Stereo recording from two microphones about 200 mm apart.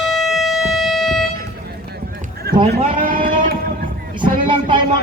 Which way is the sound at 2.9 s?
40° right (ahead or behind).